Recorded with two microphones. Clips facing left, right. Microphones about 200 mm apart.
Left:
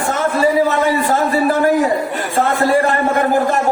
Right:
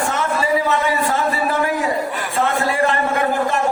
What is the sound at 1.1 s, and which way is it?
A man's voice, 45° left (ahead or behind).